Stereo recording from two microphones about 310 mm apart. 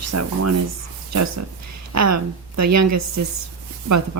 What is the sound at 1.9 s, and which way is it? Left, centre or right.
Speech, right.